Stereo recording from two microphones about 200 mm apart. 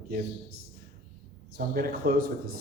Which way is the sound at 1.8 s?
50° right (ahead or behind).